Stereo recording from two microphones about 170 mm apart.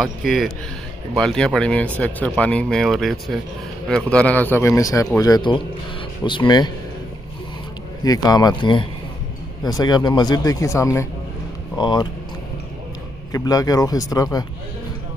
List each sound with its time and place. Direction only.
0.0 s a man's voice: centre (ahead or behind); by 6.7 s 25° left (ahead or behind)
8.0 s a man's voice: 20° left (ahead or behind)
13.3 s a man's voice: 20° left (ahead or behind)